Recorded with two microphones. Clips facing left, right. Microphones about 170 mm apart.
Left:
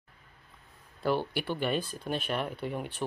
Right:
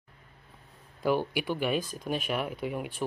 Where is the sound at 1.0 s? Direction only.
10° right (ahead or behind).